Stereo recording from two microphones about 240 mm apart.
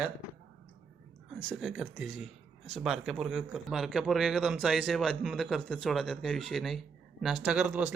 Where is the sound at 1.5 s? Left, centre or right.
Centre.